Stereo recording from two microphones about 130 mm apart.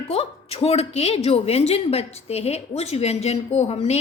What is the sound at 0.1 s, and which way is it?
A woman's voice, 50° left (ahead or behind).